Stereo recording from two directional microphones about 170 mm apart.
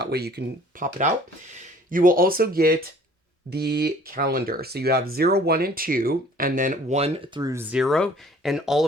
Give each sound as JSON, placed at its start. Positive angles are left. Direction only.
{"t": 0.0, "sound": "speech", "side_deg": -70}
{"t": 1.9, "sound": "speech", "side_deg": -55}
{"t": 7.4, "sound": "speech", "side_deg": -15}